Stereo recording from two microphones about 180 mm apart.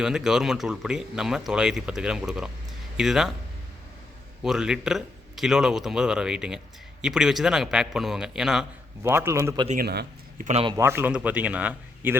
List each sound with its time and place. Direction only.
0.0 s speech: 5° right (ahead or behind)
4.4 s speech: 5° right (ahead or behind)
9.0 s speech: 15° right (ahead or behind)
9.8 s speech: 65° right (ahead or behind)
10.4 s speech: 35° right (ahead or behind)
10.8 s speech: 10° right (ahead or behind)